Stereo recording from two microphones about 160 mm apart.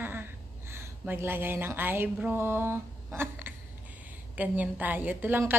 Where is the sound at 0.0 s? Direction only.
10° right (ahead or behind).